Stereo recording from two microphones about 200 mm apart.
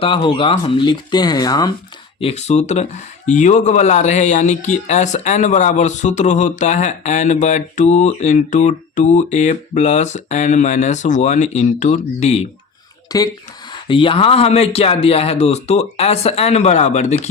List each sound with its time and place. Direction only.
0.0 s speech: 25° left (ahead or behind)
2.2 s speech: 35° left (ahead or behind)
13.1 s speech: 20° left (ahead or behind); by 17.2 s 35° left (ahead or behind)